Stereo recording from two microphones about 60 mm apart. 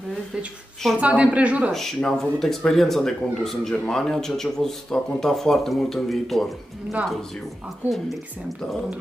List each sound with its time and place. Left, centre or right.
0.9 s a woman's voice: right
1.7 s speech: centre